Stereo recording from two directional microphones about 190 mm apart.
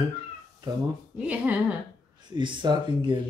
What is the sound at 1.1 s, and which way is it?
Speech, 5° right (ahead or behind).